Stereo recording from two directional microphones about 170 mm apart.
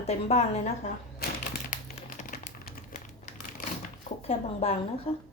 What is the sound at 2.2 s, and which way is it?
Crumpling, 50° left (ahead or behind).